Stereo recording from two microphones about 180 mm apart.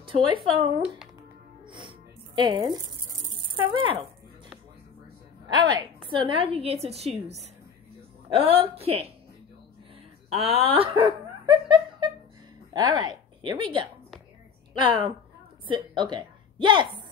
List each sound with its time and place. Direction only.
0.0 s speech: 30° right (ahead or behind)
1.6 s music: 25° right (ahead or behind)
5.5 s a woman's voice: 25° right (ahead or behind)
8.5 s a woman's voice: 35° right (ahead or behind)
10.3 s a woman's voice: 30° right (ahead or behind)